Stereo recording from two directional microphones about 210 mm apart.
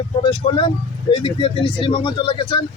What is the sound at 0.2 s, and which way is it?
Speech, 20° left (ahead or behind).